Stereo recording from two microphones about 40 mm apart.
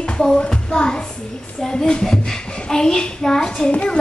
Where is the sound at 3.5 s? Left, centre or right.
Left.